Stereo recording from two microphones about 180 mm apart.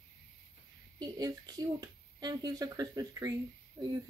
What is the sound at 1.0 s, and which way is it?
Speech, 20° right (ahead or behind).